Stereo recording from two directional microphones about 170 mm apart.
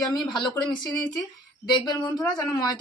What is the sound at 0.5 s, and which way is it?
Speech, 25° left (ahead or behind).